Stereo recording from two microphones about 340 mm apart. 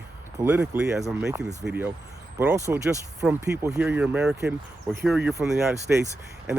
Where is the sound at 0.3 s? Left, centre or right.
Centre.